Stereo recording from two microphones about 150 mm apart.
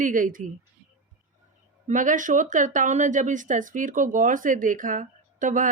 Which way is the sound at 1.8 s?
60° right (ahead or behind).